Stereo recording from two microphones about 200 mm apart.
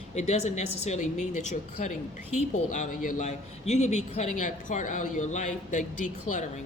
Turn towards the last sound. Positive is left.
turn(degrees=40)  # may be behind; listen again after turning